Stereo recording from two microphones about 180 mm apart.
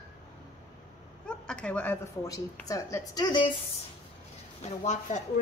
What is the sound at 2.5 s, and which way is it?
A woman's voice, 15° left (ahead or behind).